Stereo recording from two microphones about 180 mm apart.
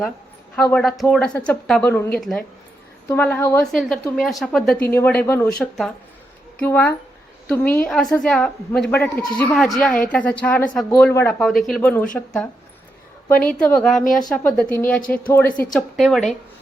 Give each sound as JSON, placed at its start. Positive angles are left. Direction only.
{"t": 0.5, "sound": "a woman's voice", "side_deg": 5}
{"t": 11.3, "sound": "a woman's voice", "side_deg": 0}
{"t": 15.4, "sound": "a woman's voice", "side_deg": 50}
{"t": 15.7, "sound": "a woman's voice", "side_deg": 0}